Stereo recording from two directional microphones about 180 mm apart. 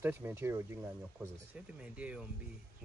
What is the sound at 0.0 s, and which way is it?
Speech, 15° right (ahead or behind).